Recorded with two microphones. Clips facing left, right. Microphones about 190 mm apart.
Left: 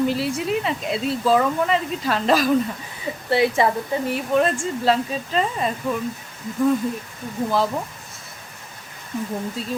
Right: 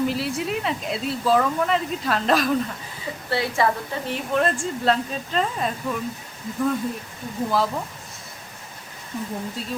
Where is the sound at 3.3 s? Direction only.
20° left (ahead or behind).